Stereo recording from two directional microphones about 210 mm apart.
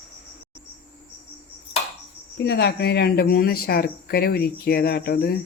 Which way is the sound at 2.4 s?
50° left (ahead or behind).